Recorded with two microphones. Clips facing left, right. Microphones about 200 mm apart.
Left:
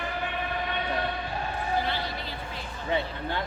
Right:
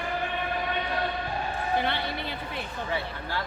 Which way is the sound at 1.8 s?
60° right (ahead or behind).